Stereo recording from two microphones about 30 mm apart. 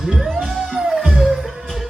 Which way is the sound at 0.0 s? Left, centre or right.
Centre.